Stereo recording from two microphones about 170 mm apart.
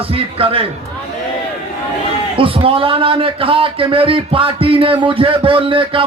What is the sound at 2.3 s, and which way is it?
A man's voice, 30° right (ahead or behind).